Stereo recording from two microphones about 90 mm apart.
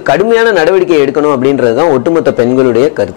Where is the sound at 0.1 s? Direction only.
20° left (ahead or behind).